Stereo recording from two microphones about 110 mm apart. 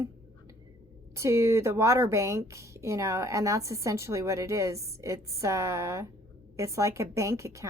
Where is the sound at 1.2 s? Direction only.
25° right (ahead or behind).